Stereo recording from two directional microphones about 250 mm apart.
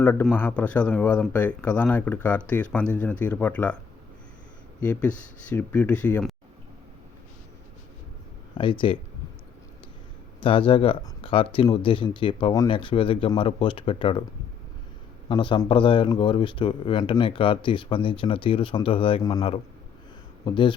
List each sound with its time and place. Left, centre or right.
0.0 s speech: centre
4.9 s speech: centre
8.5 s speech: centre
10.4 s speech: centre
15.3 s speech: centre